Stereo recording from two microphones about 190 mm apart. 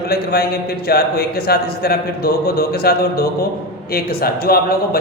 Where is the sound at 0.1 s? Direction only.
55° left (ahead or behind).